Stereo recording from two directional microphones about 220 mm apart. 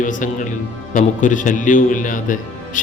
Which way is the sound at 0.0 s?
35° left (ahead or behind).